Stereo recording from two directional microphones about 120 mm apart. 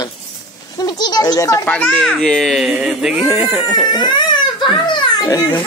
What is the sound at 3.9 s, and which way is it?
Baby cry, 35° left (ahead or behind).